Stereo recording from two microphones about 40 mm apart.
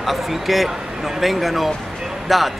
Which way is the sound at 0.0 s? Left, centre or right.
Centre.